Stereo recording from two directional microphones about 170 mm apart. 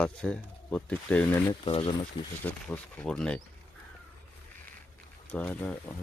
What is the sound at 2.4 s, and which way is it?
Speech, 10° left (ahead or behind).